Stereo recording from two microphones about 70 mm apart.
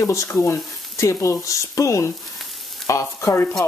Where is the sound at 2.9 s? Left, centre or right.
Left.